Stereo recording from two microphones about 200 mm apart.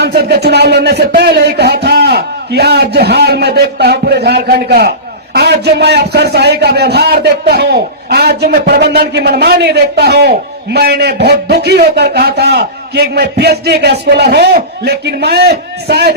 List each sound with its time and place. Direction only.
0.0 s a man's voice: 55° right (ahead or behind)